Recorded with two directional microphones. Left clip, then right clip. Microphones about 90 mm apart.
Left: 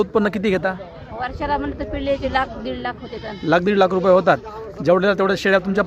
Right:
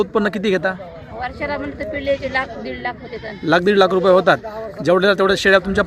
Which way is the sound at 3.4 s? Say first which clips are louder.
Right 2 dB; centre (ahead or behind).